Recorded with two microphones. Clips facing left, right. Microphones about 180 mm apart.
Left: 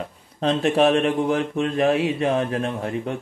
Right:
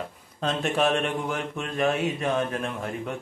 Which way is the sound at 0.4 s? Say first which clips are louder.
Left 6 dB; 35° left (ahead or behind).